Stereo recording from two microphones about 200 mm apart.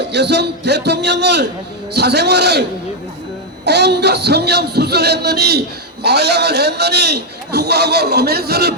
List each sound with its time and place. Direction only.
0.1 s speech: 55° right (ahead or behind)
3.7 s speech: 55° right (ahead or behind)